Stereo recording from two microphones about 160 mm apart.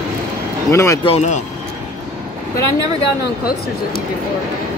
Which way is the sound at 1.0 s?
45° left (ahead or behind).